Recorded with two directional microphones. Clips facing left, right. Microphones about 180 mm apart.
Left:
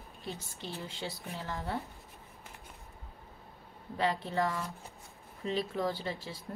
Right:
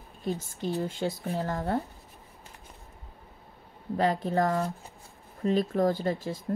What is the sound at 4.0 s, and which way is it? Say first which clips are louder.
A woman's voice: right 5 dB; 45° right (ahead or behind).